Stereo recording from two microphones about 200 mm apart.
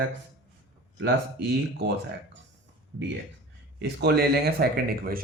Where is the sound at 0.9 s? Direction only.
60° right (ahead or behind).